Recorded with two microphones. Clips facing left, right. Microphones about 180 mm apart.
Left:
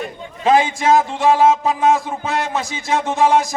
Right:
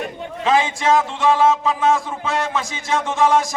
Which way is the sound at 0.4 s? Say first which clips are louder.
Left 3 dB; 40° left (ahead or behind).